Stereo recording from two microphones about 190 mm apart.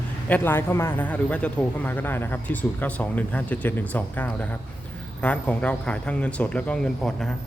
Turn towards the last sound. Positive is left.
turn(degrees=5)  # may be behind; listen again after turning